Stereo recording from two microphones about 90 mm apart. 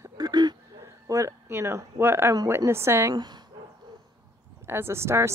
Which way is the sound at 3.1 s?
50° right (ahead or behind).